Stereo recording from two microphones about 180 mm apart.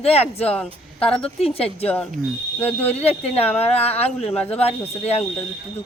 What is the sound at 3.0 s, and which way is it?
Speech, 35° left (ahead or behind).